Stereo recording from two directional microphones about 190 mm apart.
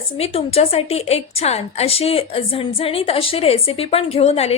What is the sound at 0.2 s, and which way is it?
A woman's voice, 30° left (ahead or behind).